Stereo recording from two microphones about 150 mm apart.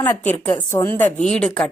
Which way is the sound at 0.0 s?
15° left (ahead or behind).